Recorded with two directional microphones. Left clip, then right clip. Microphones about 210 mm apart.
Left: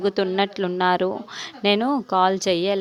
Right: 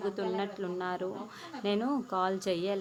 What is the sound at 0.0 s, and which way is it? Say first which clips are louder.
A woman's voice: left 12 dB; 40° left (ahead or behind).